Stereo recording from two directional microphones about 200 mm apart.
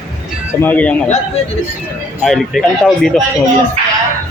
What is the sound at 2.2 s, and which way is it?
Speech, centre (ahead or behind).